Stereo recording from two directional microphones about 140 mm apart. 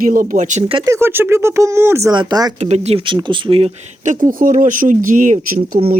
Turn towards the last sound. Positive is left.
turn(degrees=-70)  # may be behind; listen again after turning